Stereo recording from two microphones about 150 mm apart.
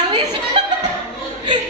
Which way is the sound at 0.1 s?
30° right (ahead or behind).